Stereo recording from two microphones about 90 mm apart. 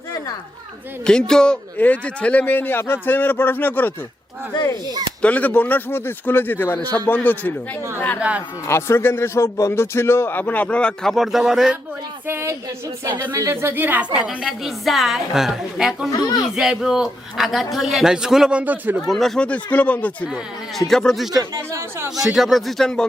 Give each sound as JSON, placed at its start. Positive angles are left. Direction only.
{"t": 1.0, "sound": "speech", "side_deg": 10}
{"t": 4.5, "sound": "speech", "side_deg": 40}
{"t": 5.2, "sound": "speech", "side_deg": 15}
{"t": 8.2, "sound": "a woman's voice", "side_deg": -15}
{"t": 8.6, "sound": "speech", "side_deg": 30}
{"t": 11.1, "sound": "speech", "side_deg": 0}
{"t": 12.3, "sound": "a woman's voice", "side_deg": -30}
{"t": 18.6, "sound": "speech", "side_deg": -20}
{"t": 19.0, "sound": "speech", "side_deg": 0}
{"t": 19.5, "sound": "speech", "side_deg": 15}
{"t": 20.7, "sound": "speech", "side_deg": 5}
{"t": 21.5, "sound": "speech", "side_deg": -30}
{"t": 22.1, "sound": "speech", "side_deg": -5}